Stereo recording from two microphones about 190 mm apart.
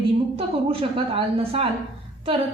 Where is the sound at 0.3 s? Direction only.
30° right (ahead or behind).